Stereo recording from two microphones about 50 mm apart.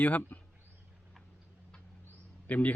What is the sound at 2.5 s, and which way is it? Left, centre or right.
Speech, left.